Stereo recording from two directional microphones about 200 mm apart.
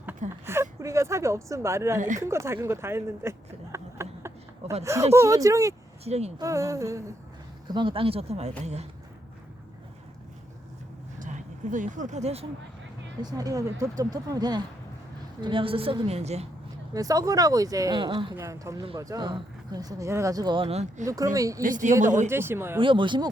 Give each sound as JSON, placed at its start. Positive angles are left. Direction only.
{"t": 0.4, "sound": "speech", "side_deg": -10}
{"t": 2.0, "sound": "speech", "side_deg": -40}
{"t": 2.2, "sound": "speech", "side_deg": -15}
{"t": 6.1, "sound": "speech", "side_deg": -30}
{"t": 6.4, "sound": "speech", "side_deg": -15}
{"t": 11.2, "sound": "speech", "side_deg": -40}
{"t": 13.3, "sound": "speech", "side_deg": -15}
{"t": 16.9, "sound": "speech", "side_deg": -15}
{"t": 21.0, "sound": "speech", "side_deg": -15}
{"t": 21.6, "sound": "speech", "side_deg": -40}
{"t": 22.3, "sound": "speech", "side_deg": -10}
{"t": 22.8, "sound": "speech", "side_deg": -25}